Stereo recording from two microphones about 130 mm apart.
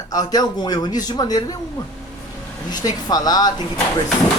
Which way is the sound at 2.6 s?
30° left (ahead or behind).